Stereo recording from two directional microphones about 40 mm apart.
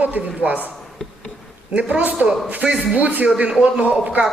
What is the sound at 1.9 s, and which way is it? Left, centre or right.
A man's voice, right.